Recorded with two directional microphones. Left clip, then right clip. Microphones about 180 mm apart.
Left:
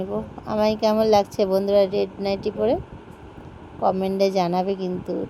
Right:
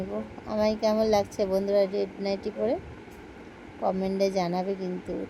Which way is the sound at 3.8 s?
25° left (ahead or behind).